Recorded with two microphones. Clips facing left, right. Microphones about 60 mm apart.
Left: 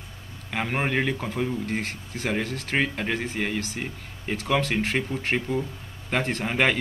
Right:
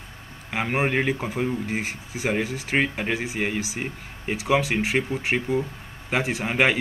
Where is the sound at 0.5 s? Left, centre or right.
Centre.